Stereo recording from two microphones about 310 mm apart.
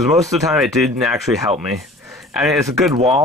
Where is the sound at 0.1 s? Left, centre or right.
Centre.